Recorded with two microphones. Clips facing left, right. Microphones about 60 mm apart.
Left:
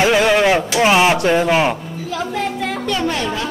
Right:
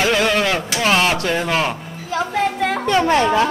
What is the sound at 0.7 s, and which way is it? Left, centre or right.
Speech, centre.